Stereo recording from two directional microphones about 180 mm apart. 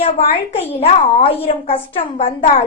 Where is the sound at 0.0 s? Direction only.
35° left (ahead or behind).